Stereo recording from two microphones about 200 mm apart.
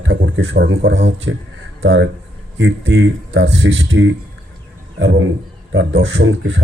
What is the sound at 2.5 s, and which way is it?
Speech, 75° right (ahead or behind).